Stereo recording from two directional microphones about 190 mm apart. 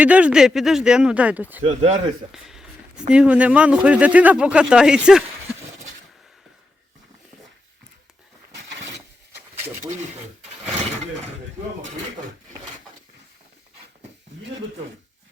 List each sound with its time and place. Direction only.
0.0 s speech: 5° right (ahead or behind)
1.6 s speech: 40° right (ahead or behind)
2.3 s a sound: centre (ahead or behind)
3.1 s speech: 5° right (ahead or behind)